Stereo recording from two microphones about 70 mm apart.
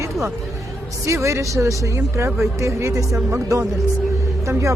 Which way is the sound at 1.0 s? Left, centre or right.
Right.